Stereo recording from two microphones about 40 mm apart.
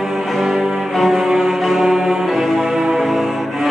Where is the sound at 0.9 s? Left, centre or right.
Centre.